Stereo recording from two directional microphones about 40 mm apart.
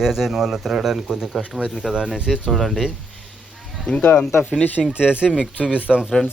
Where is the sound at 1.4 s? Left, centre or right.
Centre.